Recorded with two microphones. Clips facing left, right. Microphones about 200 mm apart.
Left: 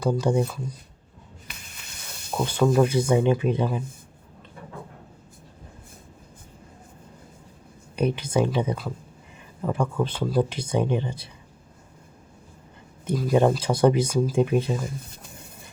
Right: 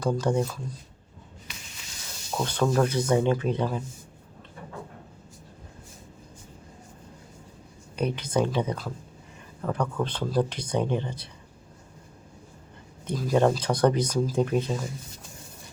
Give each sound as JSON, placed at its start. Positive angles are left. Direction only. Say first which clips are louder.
{"t": 0.0, "sound": "speech", "louder": "left 2 dB", "side_deg": 10}
{"t": 1.5, "sound": "snake", "louder": "even", "side_deg": 55}
{"t": 2.4, "sound": "speech", "louder": "left 4 dB", "side_deg": 10}
{"t": 7.9, "sound": "speech", "louder": "left 3 dB", "side_deg": 10}
{"t": 13.1, "sound": "speech", "louder": "left 2 dB", "side_deg": 5}